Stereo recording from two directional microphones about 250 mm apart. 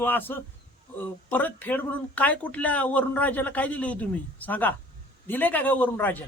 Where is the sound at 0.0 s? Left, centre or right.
Centre.